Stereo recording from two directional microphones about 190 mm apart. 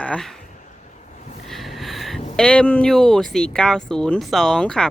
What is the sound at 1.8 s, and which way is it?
Speech, centre (ahead or behind).